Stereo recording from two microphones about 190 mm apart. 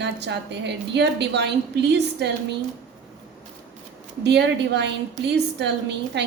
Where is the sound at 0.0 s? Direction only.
65° right (ahead or behind).